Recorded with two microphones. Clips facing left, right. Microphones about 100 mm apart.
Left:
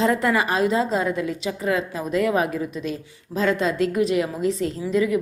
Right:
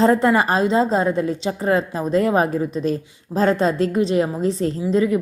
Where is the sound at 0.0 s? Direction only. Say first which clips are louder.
Right 5 dB; 30° right (ahead or behind).